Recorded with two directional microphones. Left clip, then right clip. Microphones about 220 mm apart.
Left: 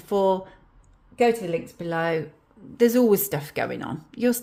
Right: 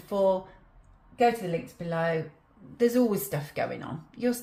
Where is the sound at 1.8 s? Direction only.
45° left (ahead or behind).